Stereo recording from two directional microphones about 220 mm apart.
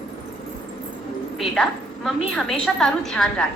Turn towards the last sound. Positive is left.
turn(degrees=5)  # may be behind; listen again after turning